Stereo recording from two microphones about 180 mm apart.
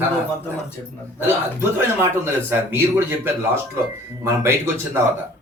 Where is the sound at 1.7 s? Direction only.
15° right (ahead or behind).